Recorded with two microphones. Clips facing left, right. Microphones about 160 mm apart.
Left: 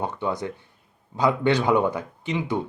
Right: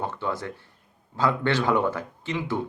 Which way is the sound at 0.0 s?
15° left (ahead or behind).